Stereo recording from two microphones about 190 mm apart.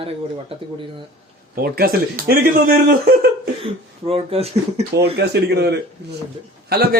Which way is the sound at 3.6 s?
30° right (ahead or behind).